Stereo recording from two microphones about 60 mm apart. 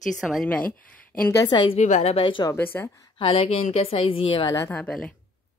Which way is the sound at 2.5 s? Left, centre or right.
Left.